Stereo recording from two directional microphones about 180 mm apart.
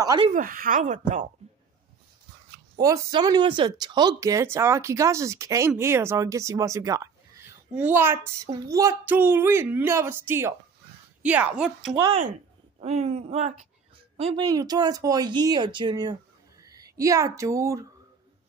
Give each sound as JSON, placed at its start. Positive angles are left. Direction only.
{"t": 0.0, "sound": "speech", "side_deg": -20}
{"t": 0.3, "sound": "speech", "side_deg": -50}
{"t": 2.8, "sound": "a woman's voice", "side_deg": -20}
{"t": 12.8, "sound": "speech", "side_deg": -35}
{"t": 14.4, "sound": "speech", "side_deg": -20}